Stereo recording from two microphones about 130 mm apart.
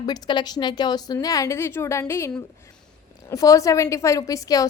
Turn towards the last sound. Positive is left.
turn(degrees=25)  # may be behind; listen again after turning